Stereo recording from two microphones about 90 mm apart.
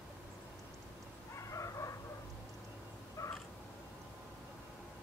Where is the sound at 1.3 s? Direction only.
35° left (ahead or behind).